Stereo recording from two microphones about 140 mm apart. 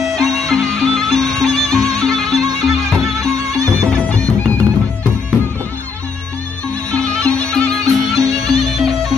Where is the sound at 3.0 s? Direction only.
25° right (ahead or behind).